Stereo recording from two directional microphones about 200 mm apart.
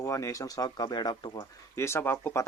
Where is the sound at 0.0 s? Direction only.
15° left (ahead or behind).